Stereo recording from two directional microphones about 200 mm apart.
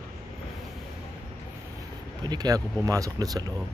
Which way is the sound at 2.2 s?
20° right (ahead or behind).